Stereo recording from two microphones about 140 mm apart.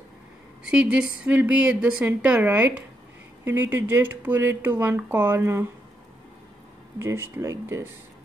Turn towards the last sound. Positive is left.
turn(degrees=-20)  # may be behind; listen again after turning